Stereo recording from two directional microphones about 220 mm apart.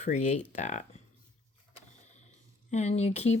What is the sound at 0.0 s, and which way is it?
Speech, 30° left (ahead or behind).